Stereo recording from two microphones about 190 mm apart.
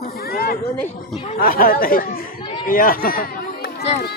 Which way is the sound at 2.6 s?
50° left (ahead or behind).